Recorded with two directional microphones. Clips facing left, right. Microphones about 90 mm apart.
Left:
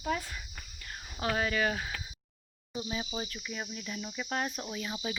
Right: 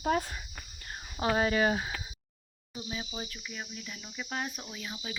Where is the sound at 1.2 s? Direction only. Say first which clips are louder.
Right 3 dB; 25° right (ahead or behind).